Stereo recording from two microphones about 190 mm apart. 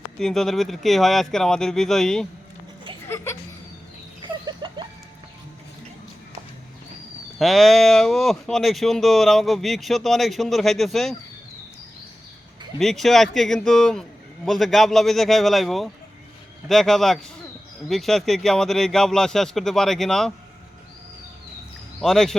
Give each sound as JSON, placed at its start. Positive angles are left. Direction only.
{"t": 0.2, "sound": "speech", "side_deg": 0}
{"t": 4.3, "sound": "a sound", "side_deg": -25}
{"t": 7.3, "sound": "speech", "side_deg": 0}
{"t": 12.8, "sound": "speech", "side_deg": 0}
{"t": 22.0, "sound": "speech", "side_deg": 0}